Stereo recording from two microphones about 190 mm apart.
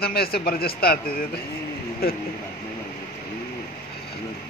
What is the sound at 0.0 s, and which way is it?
Speech, 55° left (ahead or behind).